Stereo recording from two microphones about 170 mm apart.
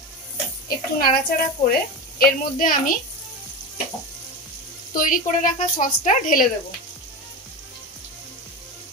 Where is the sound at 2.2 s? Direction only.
55° left (ahead or behind).